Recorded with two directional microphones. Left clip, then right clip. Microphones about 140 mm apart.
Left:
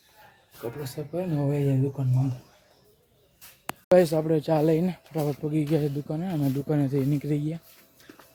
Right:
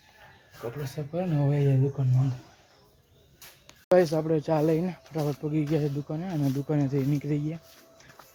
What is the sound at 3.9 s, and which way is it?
Speech, 20° left (ahead or behind).